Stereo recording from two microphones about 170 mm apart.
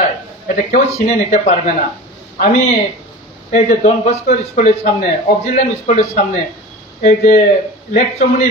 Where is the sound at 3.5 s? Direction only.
45° left (ahead or behind).